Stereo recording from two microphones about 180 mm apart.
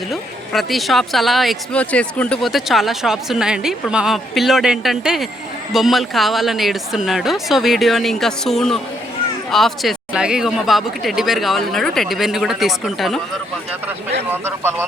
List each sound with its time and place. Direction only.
0.1 s speech: centre (ahead or behind)
14.3 s speech: 15° right (ahead or behind)